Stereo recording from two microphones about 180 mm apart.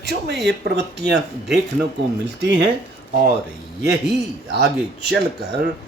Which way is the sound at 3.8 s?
65° right (ahead or behind).